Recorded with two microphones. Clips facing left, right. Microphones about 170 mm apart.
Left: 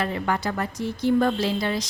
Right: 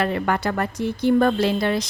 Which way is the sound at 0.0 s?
65° right (ahead or behind).